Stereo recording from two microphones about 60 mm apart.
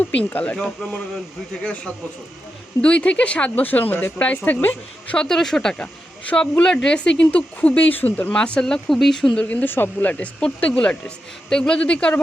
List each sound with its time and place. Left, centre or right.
0.0 s speech: left
0.5 s speech: centre; by 5.1 s left
5.1 s speech: centre; by 8.3 s left
8.3 s speech: centre
9.3 s speech: left